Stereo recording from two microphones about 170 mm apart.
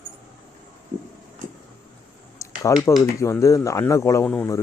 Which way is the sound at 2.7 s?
20° left (ahead or behind).